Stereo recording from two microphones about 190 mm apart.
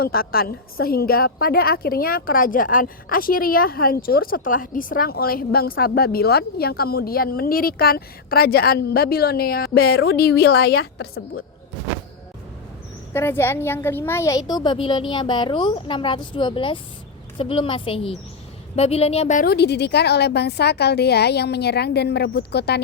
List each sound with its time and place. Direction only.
0.0 s a woman's voice: 50° left (ahead or behind); by 11.4 s 80° left
13.1 s a woman's voice: 10° left (ahead or behind); by 19.5 s 35° left (ahead or behind)
19.5 s a woman's voice: 60° left (ahead or behind)